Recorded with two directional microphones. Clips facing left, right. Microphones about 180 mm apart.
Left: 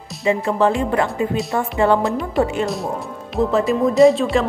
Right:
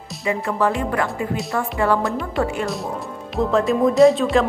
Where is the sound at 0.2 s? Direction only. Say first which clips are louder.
Left 4 dB; 25° left (ahead or behind).